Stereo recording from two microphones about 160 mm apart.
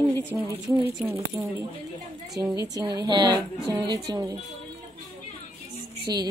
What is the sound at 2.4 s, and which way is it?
A woman's voice, 20° right (ahead or behind).